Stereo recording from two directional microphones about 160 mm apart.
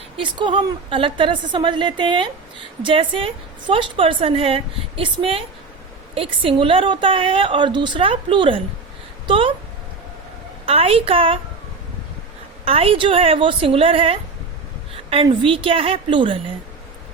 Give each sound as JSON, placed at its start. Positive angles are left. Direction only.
{"t": 0.2, "sound": "a woman's voice", "side_deg": -30}
{"t": 10.7, "sound": "a woman's voice", "side_deg": -35}
{"t": 12.6, "sound": "a woman's voice", "side_deg": -35}